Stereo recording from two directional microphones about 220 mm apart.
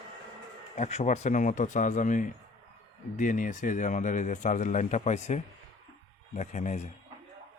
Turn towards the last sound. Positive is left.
turn(degrees=30)  # may be behind; listen again after turning